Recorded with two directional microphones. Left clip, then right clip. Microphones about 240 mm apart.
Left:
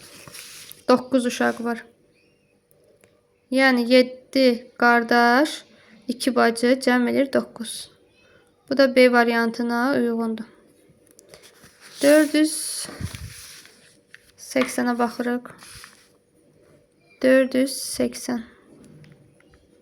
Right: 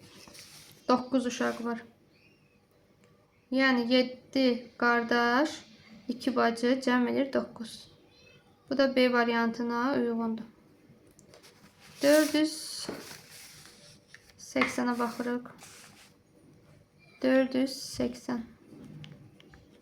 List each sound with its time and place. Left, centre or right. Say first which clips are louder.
0.9 s a woman's voice: left 8 dB; left
3.5 s a woman's voice: left 9 dB; left
11.9 s speech: left 7 dB; left
14.3 s a woman's voice: left 6 dB; left
17.2 s a woman's voice: left 9 dB; left